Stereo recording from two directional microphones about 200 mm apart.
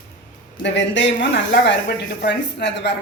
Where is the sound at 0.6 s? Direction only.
60° left (ahead or behind).